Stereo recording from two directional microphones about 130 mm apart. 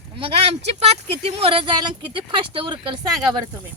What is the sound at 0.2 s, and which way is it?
Speech, 50° right (ahead or behind).